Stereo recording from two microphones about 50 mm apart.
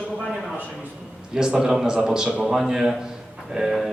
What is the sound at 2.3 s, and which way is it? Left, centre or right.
Speech, right.